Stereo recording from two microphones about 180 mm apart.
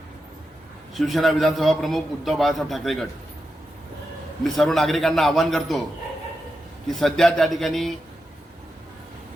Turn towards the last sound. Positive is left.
turn(degrees=0)  # may be behind; listen again after turning